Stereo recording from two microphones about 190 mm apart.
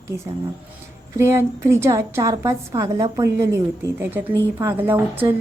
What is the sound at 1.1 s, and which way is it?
A woman's voice, 15° right (ahead or behind).